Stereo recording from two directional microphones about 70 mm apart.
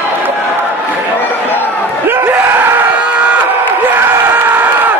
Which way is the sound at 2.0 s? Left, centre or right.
Right.